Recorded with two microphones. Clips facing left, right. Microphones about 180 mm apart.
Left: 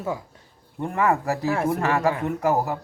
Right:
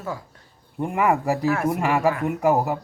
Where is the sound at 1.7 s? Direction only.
15° right (ahead or behind).